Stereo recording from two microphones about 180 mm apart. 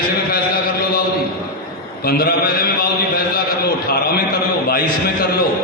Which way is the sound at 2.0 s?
55° left (ahead or behind).